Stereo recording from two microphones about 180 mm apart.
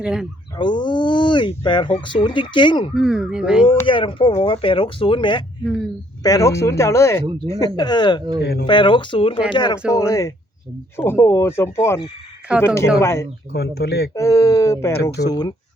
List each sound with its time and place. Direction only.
0.0 s speech: 5° right (ahead or behind)
0.5 s speech: 25° left (ahead or behind)
2.9 s speech: 5° right (ahead or behind)
3.8 s speech: 30° left (ahead or behind)
8.4 s speech: 65° left (ahead or behind)
8.6 s speech: 25° left (ahead or behind)
13.5 s speech: 65° left (ahead or behind)
14.1 s speech: 15° left (ahead or behind)